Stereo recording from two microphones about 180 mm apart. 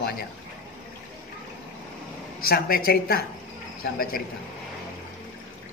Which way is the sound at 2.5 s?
55° left (ahead or behind).